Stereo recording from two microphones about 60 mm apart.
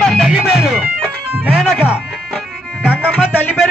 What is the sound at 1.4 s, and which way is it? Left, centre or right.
Music, centre.